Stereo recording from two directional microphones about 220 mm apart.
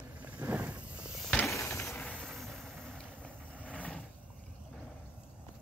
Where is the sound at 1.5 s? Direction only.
15° left (ahead or behind).